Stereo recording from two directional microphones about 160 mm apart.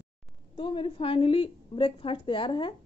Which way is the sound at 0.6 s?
30° left (ahead or behind).